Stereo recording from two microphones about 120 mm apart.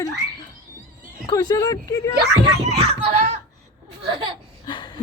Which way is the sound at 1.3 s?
30° left (ahead or behind).